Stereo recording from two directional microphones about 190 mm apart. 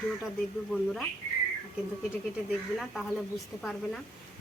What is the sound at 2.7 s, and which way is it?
Speech, centre (ahead or behind).